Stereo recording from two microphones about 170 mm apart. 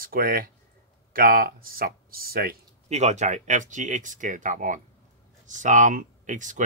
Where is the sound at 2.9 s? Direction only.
45° right (ahead or behind).